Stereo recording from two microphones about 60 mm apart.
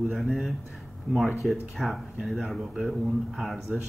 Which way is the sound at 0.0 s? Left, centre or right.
Centre.